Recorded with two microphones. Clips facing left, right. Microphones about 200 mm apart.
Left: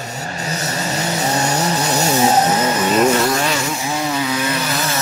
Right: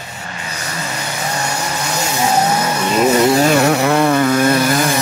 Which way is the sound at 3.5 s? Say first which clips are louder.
Right 9 dB; 65° right (ahead or behind).